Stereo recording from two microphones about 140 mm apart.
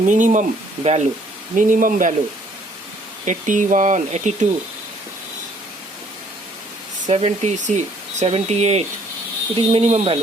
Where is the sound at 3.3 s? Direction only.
65° right (ahead or behind).